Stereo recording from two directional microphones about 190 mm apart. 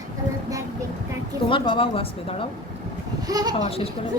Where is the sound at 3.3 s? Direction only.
20° right (ahead or behind).